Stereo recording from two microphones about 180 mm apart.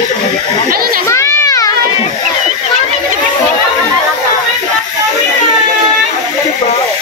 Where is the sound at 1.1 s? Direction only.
15° left (ahead or behind).